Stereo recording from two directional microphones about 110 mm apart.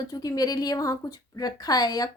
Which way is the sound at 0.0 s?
35° left (ahead or behind).